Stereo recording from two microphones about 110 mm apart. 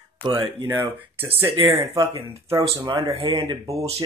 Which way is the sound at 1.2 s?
20° right (ahead or behind).